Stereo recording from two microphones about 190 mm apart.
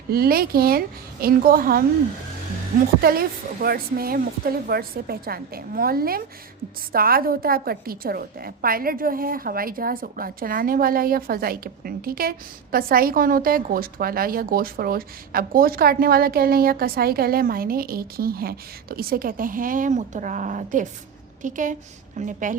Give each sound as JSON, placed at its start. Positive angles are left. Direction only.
{"t": 0.1, "sound": "a woman's voice", "side_deg": -50}
{"t": 3.0, "sound": "a woman's voice", "side_deg": -50}